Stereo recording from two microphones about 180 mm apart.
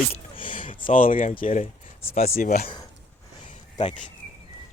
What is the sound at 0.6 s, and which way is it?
Speech, 45° left (ahead or behind).